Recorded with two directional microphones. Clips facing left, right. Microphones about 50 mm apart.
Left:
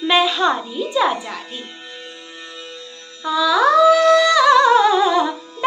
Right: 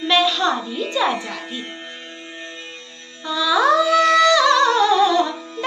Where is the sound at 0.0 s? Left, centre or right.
Centre.